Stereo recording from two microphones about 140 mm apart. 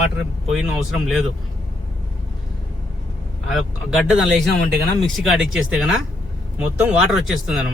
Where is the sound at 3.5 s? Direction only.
Centre (ahead or behind).